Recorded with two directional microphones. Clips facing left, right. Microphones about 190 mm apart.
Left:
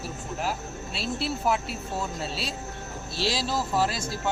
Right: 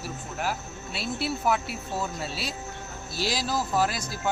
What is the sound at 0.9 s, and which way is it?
Speech, 30° left (ahead or behind).